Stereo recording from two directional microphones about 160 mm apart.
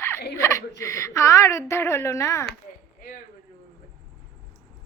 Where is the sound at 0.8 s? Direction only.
20° left (ahead or behind).